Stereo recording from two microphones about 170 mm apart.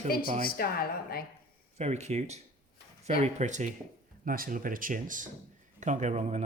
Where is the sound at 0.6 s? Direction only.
60° left (ahead or behind).